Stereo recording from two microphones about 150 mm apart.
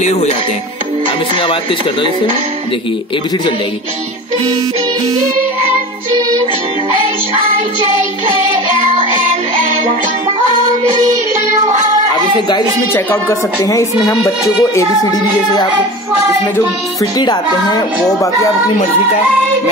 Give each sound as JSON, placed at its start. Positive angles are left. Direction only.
{"t": 0.0, "sound": "speech", "side_deg": 50}
{"t": 1.4, "sound": "speech", "side_deg": 35}
{"t": 12.9, "sound": "speech", "side_deg": 15}